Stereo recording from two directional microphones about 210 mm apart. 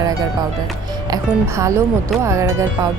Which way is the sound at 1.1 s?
15° right (ahead or behind).